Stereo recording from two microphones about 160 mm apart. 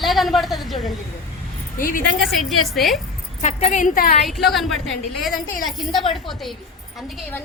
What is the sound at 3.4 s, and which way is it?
Speech, 50° left (ahead or behind).